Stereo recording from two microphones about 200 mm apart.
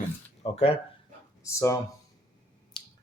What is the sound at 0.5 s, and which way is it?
Speech, 30° left (ahead or behind).